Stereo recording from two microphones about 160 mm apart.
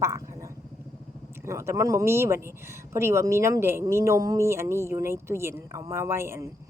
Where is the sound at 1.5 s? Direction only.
15° right (ahead or behind).